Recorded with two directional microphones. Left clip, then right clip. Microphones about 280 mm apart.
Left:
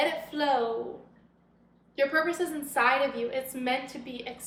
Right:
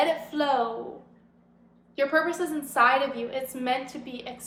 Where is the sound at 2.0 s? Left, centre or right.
Centre.